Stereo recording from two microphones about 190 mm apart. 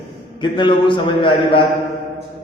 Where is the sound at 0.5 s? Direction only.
25° left (ahead or behind).